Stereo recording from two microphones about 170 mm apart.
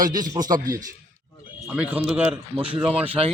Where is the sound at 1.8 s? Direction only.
5° right (ahead or behind).